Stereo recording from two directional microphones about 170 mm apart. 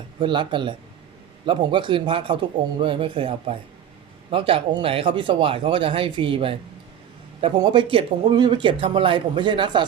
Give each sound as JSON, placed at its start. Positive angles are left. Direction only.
{"t": 0.2, "sound": "speech", "side_deg": -30}